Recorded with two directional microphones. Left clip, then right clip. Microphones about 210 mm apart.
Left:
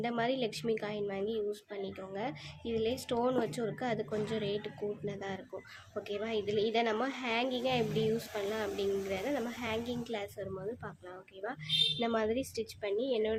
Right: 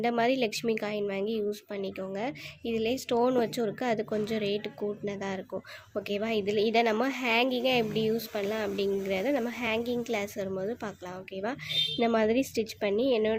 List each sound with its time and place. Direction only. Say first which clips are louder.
0.0 s a woman's voice: right 7 dB; 30° right (ahead or behind)
11.9 s speech: right 7 dB; 25° right (ahead or behind)